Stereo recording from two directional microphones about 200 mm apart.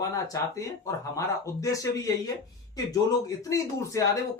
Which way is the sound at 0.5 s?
15° left (ahead or behind).